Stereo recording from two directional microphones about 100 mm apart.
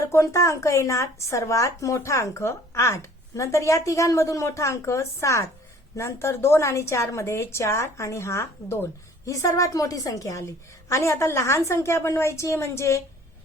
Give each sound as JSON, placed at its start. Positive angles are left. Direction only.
{"t": 0.0, "sound": "a woman's voice", "side_deg": 30}